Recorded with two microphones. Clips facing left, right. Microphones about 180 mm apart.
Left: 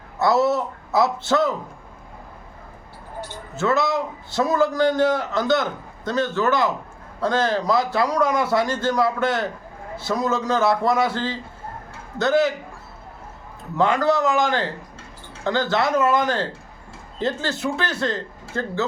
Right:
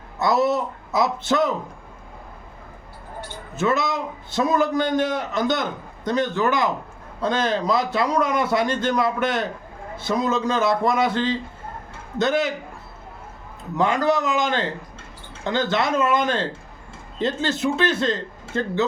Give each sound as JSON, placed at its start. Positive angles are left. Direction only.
{"t": 0.2, "sound": "a man's voice", "side_deg": -20}
{"t": 3.5, "sound": "a man's voice", "side_deg": -20}
{"t": 13.7, "sound": "a man's voice", "side_deg": -15}